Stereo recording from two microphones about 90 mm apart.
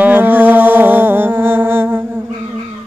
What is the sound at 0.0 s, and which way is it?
Music, 20° right (ahead or behind).